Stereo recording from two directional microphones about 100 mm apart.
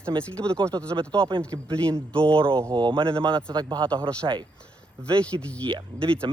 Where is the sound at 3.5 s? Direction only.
45° right (ahead or behind).